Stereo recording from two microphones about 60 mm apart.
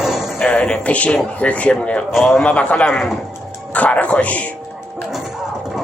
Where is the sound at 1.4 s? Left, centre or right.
Left.